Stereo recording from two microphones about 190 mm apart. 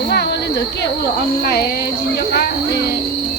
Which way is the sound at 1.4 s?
60° left (ahead or behind).